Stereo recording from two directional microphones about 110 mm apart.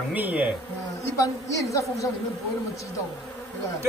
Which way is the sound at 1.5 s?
30° left (ahead or behind).